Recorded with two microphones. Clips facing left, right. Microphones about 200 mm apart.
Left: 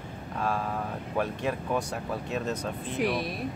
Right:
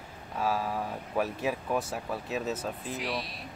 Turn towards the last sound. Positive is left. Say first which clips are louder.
# left 6 dB
turn(degrees=55)  # may be behind; listen again after turning